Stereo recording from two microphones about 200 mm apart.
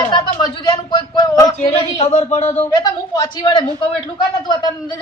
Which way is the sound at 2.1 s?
35° left (ahead or behind).